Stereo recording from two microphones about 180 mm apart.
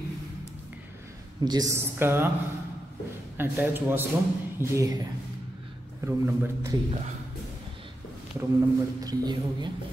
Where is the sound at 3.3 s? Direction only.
10° right (ahead or behind).